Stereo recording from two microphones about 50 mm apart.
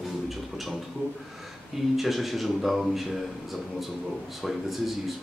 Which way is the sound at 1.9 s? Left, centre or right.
Centre.